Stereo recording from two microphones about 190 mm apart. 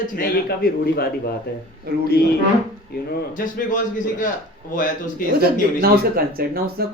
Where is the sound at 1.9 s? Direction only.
55° right (ahead or behind).